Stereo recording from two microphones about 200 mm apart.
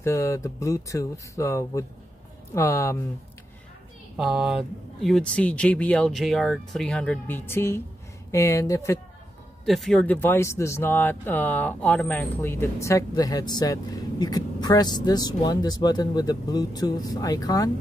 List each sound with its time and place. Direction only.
0.0 s speech: 15° left (ahead or behind)
4.2 s speech: 5° right (ahead or behind); by 9.0 s 15° left (ahead or behind)
9.7 s speech: centre (ahead or behind); by 17.6 s 20° left (ahead or behind)